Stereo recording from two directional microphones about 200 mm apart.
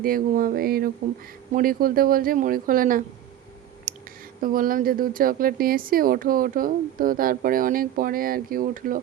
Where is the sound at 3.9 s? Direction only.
45° right (ahead or behind).